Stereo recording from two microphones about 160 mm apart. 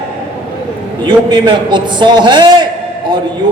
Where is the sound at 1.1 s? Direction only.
30° right (ahead or behind).